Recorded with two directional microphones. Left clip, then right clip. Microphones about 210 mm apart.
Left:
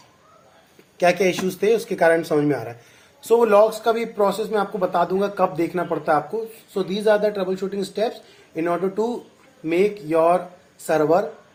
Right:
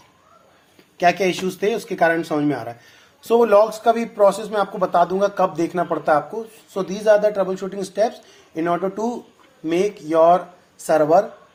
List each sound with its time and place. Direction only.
0.9 s a man's voice: 30° right (ahead or behind)